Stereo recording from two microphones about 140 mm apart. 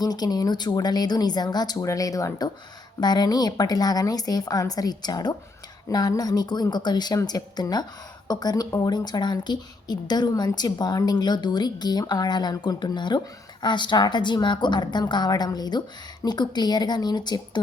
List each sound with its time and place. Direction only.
0.0 s a woman's voice: 30° left (ahead or behind)